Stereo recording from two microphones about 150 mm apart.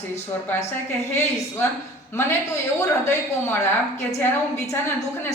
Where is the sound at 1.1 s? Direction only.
15° left (ahead or behind).